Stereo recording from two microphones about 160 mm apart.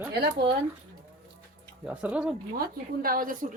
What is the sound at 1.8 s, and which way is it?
Speech, 5° right (ahead or behind).